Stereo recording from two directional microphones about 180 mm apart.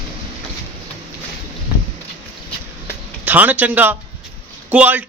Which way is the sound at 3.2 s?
10° right (ahead or behind).